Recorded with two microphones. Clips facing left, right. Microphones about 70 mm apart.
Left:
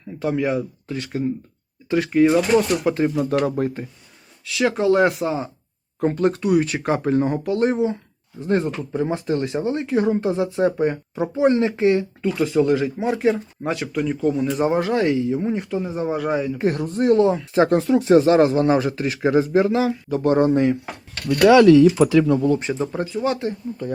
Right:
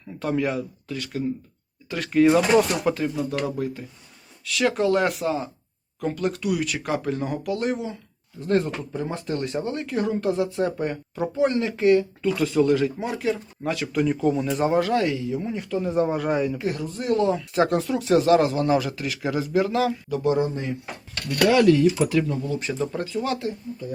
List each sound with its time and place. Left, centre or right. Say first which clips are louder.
0.2 s speech: left 3 dB; centre
0.9 s speech: left 3 dB; left
2.1 s speech: even; centre
3.2 s speech: left 6 dB; left
4.4 s speech: left 3 dB; left
13.6 s speech: left 2 dB; centre
13.9 s speech: right 1 dB; centre
14.7 s speech: left 1 dB; left
15.8 s speech: right 1 dB; centre
16.6 s speech: left 7 dB; left
20.3 s speech: left 8 dB; left
21.4 s speech: left 6 dB; left
22.6 s speech: left 3 dB; left